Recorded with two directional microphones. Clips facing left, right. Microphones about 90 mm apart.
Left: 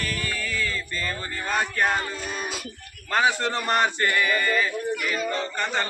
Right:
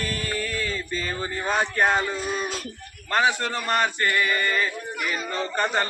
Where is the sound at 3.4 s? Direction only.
Centre (ahead or behind).